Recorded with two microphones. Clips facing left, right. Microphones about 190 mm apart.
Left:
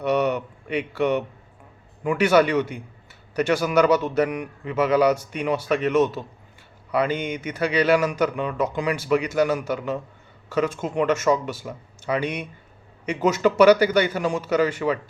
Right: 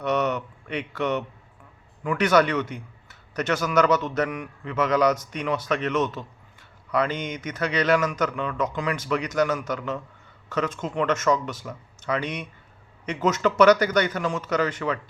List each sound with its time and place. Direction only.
0.0 s speech: 10° left (ahead or behind)